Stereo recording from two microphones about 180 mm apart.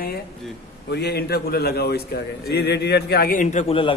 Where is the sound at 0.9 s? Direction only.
65° left (ahead or behind).